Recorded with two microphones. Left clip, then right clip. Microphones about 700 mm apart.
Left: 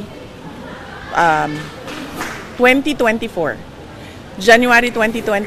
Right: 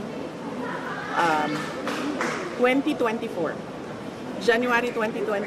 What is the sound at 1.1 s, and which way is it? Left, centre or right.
Speech, left.